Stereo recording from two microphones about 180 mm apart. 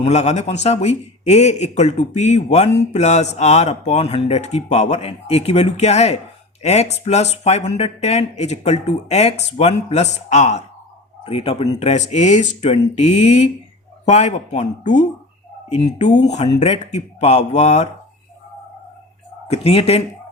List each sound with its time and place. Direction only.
0.0 s a man's voice: 40° left (ahead or behind)
19.5 s a man's voice: 35° left (ahead or behind)